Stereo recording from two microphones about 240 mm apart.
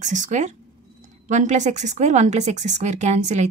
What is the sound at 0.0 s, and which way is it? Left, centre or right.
A woman's voice, right.